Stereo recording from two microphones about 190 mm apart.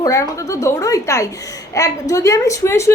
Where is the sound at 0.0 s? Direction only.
15° left (ahead or behind).